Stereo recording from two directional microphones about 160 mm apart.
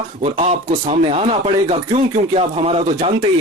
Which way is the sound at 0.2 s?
40° right (ahead or behind).